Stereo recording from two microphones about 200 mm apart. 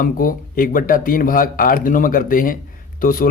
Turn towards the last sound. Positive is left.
turn(degrees=45)  # may be behind; listen again after turning